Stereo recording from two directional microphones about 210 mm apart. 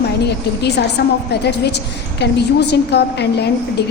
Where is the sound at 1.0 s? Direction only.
50° left (ahead or behind).